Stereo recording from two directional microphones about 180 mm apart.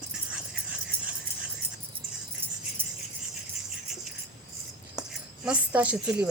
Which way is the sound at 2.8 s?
10° right (ahead or behind).